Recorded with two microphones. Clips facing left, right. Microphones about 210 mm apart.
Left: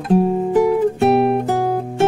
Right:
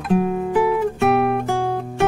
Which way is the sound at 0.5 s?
40° left (ahead or behind).